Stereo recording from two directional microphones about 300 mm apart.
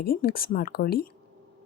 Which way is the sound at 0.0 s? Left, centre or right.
Left.